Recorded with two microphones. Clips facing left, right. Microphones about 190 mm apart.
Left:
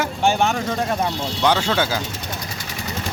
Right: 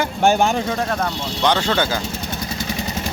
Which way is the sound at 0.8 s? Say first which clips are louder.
Even; 10° left (ahead or behind).